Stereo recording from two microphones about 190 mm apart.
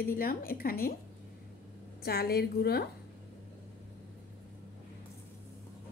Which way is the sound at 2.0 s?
55° left (ahead or behind).